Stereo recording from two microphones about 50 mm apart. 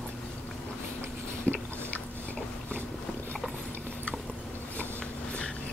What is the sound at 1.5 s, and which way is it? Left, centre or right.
Biting, left.